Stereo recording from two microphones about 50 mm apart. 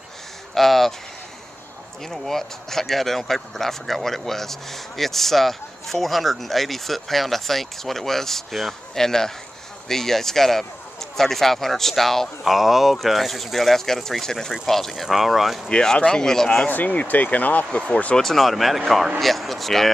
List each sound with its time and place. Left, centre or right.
0.6 s speech: centre
2.0 s speech: centre
15.7 s speech: centre
16.6 s speech: left
18.1 s speech: centre